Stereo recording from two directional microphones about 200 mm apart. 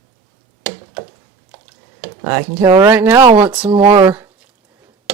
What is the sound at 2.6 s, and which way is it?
Speech, 15° right (ahead or behind).